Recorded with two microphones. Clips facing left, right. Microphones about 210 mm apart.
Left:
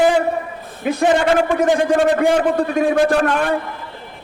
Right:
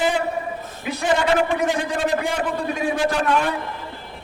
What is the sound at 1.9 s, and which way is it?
A man's voice, 55° left (ahead or behind).